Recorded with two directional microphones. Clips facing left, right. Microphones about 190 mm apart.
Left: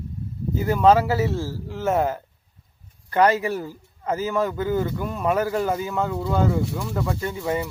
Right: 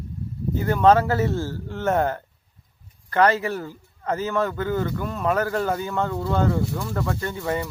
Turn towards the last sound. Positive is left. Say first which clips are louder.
# left 1 dB
turn(degrees=10)  # may be behind; listen again after turning